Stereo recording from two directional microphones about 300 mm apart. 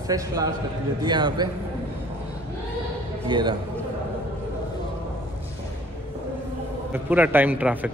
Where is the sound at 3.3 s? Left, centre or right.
Centre.